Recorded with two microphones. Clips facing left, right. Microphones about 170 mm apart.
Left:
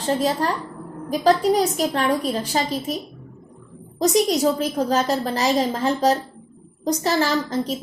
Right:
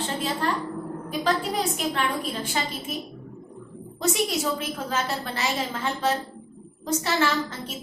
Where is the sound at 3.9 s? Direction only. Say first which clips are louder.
Left 7 dB; 40° left (ahead or behind).